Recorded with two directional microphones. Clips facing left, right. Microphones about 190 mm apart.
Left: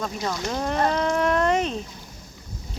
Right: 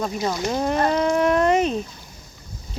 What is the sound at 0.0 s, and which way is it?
Speech, 10° right (ahead or behind).